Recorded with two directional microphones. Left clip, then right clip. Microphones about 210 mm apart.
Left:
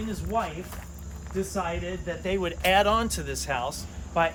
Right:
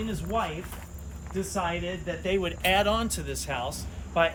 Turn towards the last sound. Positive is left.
turn(degrees=10)  # may be behind; listen again after turning